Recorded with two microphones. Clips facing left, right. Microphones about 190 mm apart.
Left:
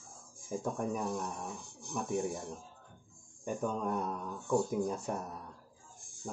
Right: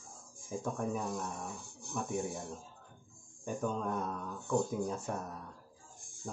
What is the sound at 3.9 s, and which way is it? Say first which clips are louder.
Speech: left 2 dB; 15° left (ahead or behind).